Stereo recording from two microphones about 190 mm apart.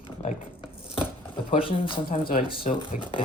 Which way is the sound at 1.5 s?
30° left (ahead or behind).